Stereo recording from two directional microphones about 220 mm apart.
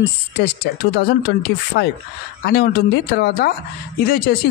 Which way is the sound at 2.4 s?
45° left (ahead or behind).